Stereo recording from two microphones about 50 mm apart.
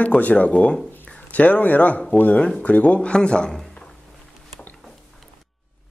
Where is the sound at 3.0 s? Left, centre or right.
Centre.